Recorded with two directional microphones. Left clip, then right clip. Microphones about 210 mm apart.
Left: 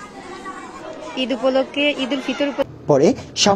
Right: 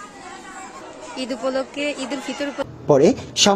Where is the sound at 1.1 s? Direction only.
Centre (ahead or behind).